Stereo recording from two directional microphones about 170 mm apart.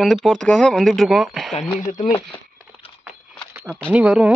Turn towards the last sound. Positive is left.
turn(degrees=-5)  # may be behind; listen again after turning